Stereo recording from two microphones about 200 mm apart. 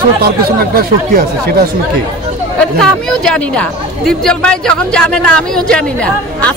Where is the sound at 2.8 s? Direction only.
5° left (ahead or behind).